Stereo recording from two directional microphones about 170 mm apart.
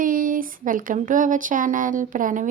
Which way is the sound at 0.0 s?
55° right (ahead or behind).